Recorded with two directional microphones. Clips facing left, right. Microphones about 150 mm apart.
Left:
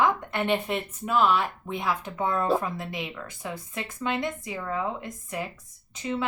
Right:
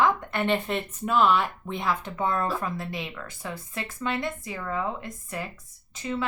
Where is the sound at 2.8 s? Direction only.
15° left (ahead or behind).